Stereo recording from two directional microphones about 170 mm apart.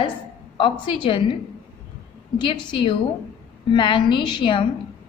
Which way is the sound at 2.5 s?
30° left (ahead or behind).